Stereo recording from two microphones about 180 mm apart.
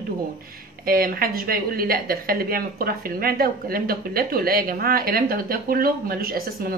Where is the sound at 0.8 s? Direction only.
55° right (ahead or behind).